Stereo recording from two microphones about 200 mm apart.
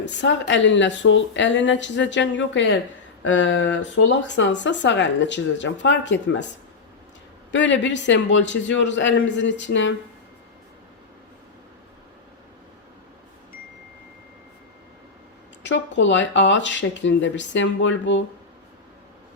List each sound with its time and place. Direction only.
0.0 s speech: 65° left (ahead or behind)
7.5 s speech: 65° left (ahead or behind)
15.6 s speech: 65° left (ahead or behind)